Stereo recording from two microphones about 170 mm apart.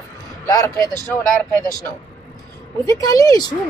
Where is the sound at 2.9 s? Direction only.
20° left (ahead or behind).